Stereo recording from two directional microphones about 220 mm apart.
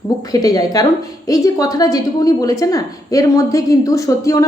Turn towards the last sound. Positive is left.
turn(degrees=15)  # may be behind; listen again after turning